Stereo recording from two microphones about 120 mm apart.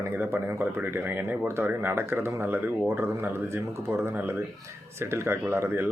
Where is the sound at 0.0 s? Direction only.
20° right (ahead or behind).